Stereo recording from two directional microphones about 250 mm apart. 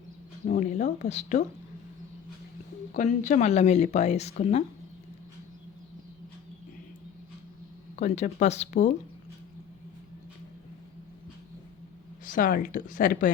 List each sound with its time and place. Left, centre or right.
0.4 s speech: left
2.9 s speech: left
7.9 s speech: left
12.2 s speech: left